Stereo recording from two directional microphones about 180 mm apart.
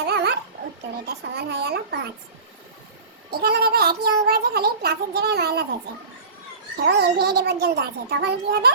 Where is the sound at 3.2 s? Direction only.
60° right (ahead or behind).